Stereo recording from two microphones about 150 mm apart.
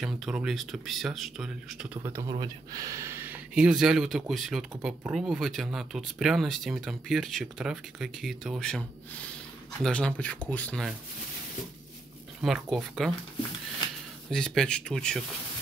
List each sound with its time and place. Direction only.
0.0 s speech: 5° right (ahead or behind)
2.0 s speech: 20° right (ahead or behind); by 10.9 s 10° left (ahead or behind)
12.4 s speech: centre (ahead or behind)
14.3 s speech: 5° left (ahead or behind)